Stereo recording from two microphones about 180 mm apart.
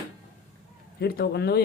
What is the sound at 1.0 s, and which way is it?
Speech, 60° left (ahead or behind).